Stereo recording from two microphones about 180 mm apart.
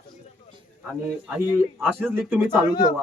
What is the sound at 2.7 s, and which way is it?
Speech, 20° left (ahead or behind).